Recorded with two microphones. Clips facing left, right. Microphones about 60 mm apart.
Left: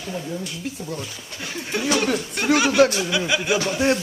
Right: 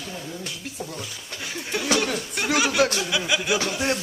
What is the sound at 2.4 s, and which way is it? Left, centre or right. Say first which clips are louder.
Speech: left 4 dB; centre.